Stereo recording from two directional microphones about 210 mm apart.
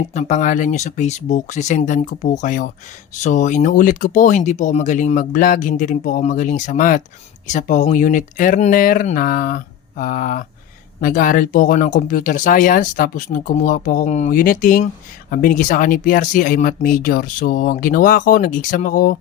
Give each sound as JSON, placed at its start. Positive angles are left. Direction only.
{"t": 0.1, "sound": "speech", "side_deg": 35}